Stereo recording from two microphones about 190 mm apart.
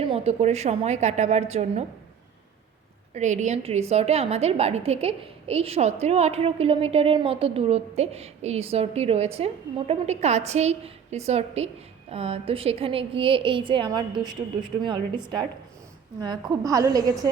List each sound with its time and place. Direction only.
0.0 s a woman's voice: 30° right (ahead or behind)
3.2 s a woman's voice: 40° right (ahead or behind); by 15.2 s 25° right (ahead or behind)
16.2 s a woman's voice: 20° right (ahead or behind)